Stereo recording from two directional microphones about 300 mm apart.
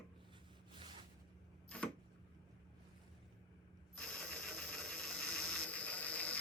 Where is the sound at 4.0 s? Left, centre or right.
Centre.